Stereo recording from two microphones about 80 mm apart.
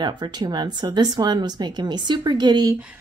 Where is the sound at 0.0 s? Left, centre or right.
Right.